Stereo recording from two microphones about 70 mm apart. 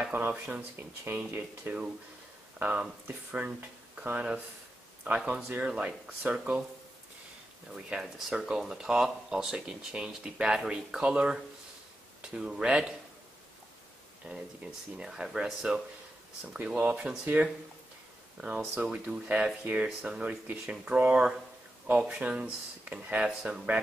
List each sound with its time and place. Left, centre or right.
0.1 s speech: right
7.7 s speech: centre
14.2 s speech: centre
18.8 s speech: centre